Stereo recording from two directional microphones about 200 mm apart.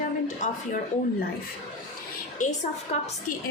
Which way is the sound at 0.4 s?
40° left (ahead or behind).